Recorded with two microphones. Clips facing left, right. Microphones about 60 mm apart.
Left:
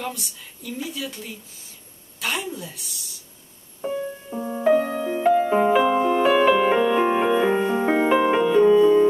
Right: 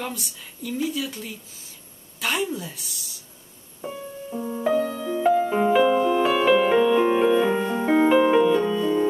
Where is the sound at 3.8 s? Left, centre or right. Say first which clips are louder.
Left 6 dB; centre.